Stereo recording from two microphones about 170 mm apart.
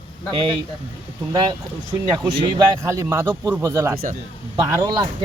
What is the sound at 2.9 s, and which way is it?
Speech, 15° right (ahead or behind).